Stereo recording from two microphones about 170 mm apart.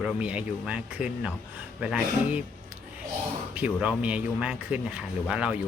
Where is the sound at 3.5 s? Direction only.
10° right (ahead or behind).